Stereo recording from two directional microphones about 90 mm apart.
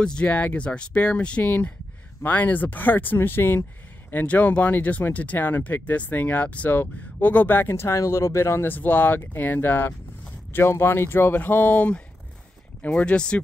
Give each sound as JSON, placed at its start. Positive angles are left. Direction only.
{"t": 0.0, "sound": "speech", "side_deg": 10}